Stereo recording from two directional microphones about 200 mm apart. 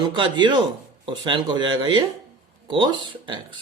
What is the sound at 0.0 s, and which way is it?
Speech, 25° right (ahead or behind).